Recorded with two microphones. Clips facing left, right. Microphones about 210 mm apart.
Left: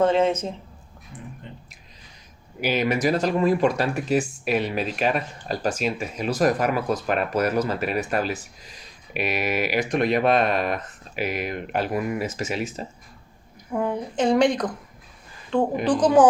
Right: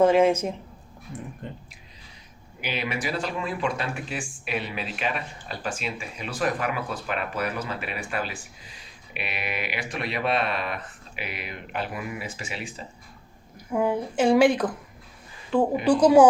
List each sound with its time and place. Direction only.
0.0 s speech: 10° right (ahead or behind)
1.4 s a sound: 45° right (ahead or behind)
2.6 s speech: 45° left (ahead or behind)
13.7 s speech: 5° right (ahead or behind)
15.8 s speech: 10° right (ahead or behind)